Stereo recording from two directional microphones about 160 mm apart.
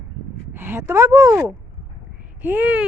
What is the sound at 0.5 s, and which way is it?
Speech, 15° right (ahead or behind).